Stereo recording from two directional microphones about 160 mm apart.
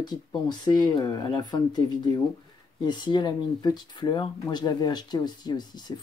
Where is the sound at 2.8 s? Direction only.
30° left (ahead or behind).